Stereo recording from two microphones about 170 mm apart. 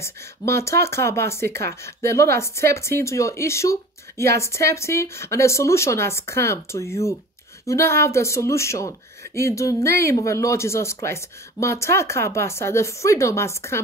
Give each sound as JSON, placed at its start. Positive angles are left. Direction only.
{"t": 0.0, "sound": "speech", "side_deg": 15}